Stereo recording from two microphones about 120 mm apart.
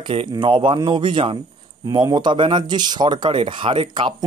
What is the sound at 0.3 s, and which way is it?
A man's voice, 40° right (ahead or behind).